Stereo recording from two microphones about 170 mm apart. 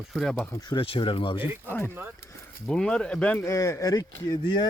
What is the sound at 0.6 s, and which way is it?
Speech, 25° left (ahead or behind).